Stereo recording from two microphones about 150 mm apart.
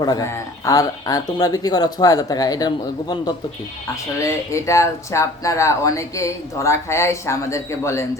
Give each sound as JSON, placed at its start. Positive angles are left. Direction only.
{"t": 0.0, "sound": "speech", "side_deg": 25}